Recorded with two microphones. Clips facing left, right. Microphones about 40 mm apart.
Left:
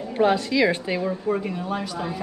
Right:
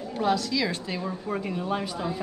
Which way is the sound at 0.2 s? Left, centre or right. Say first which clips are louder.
Left 6 dB; left.